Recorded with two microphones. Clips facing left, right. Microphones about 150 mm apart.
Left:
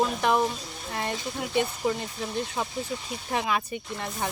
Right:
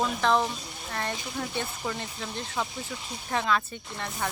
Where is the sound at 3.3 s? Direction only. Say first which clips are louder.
Even; 15° left (ahead or behind).